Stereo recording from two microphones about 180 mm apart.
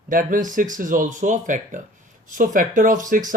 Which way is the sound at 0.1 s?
50° right (ahead or behind).